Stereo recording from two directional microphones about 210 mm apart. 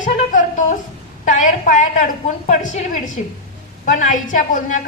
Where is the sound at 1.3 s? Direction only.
35° left (ahead or behind).